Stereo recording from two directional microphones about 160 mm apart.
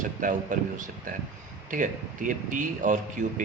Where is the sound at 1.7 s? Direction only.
55° right (ahead or behind).